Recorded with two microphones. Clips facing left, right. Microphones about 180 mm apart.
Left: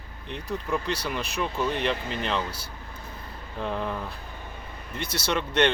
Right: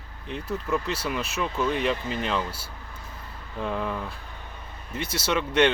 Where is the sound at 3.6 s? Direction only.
Centre (ahead or behind).